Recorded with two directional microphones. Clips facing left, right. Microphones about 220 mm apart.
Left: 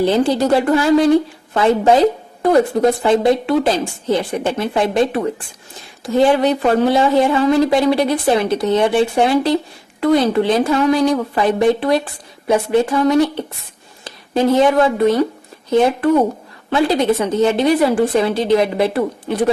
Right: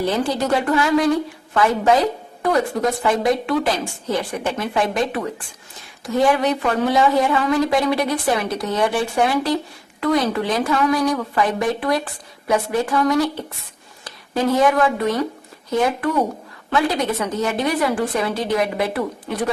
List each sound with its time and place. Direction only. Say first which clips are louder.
0.0 s a woman's voice: left 6 dB; 30° left (ahead or behind)